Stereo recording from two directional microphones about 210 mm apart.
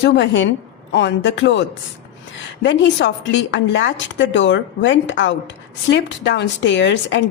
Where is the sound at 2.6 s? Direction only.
60° left (ahead or behind).